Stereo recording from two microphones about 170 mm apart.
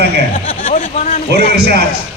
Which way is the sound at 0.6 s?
50° left (ahead or behind).